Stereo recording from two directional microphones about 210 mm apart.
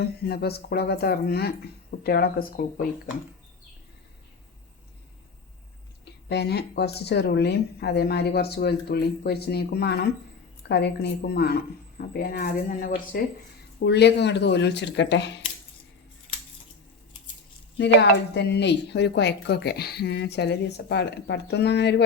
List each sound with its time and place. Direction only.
0.0 s speech: 50° left (ahead or behind)
6.2 s speech: 50° left (ahead or behind)
18.3 s speech: 55° left (ahead or behind)